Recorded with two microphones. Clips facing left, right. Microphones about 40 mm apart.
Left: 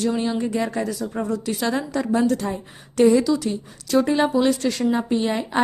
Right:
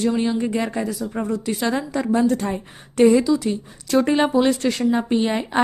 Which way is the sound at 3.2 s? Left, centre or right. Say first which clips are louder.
Right 1 dB; centre.